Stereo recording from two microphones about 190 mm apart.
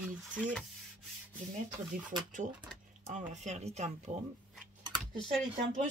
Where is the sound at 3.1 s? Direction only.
40° right (ahead or behind).